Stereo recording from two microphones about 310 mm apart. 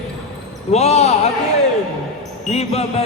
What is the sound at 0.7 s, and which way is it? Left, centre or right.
Speech, left.